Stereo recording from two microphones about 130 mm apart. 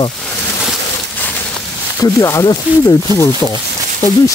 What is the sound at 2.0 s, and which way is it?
Speech, 25° left (ahead or behind).